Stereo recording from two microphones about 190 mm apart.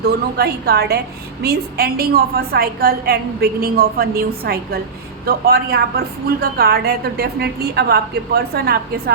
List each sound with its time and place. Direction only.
0.0 s a woman's voice: 55° right (ahead or behind)